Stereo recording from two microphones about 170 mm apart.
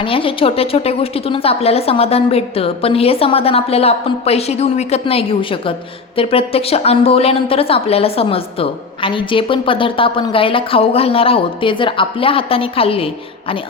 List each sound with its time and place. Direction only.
0.0 s a woman's voice: 30° left (ahead or behind)